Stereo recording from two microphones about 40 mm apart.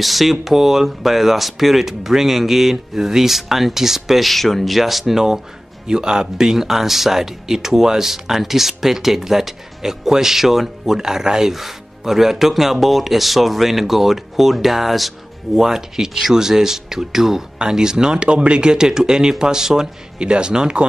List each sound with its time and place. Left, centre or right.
0.0 s speech: centre; by 20.8 s right